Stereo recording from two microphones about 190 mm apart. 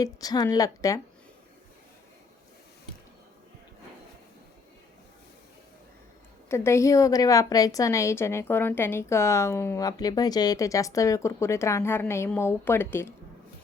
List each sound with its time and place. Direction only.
0.0 s a woman's voice: 20° left (ahead or behind)
6.5 s a woman's voice: 15° left (ahead or behind)